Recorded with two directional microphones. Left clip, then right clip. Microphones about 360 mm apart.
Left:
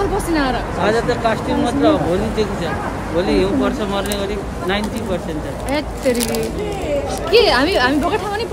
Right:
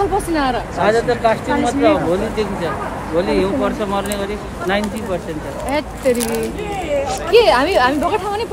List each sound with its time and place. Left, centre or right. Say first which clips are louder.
0.3 s a woman's voice: even; centre
0.8 s speech: right 2 dB; right
5.7 s a woman's voice: right 1 dB; centre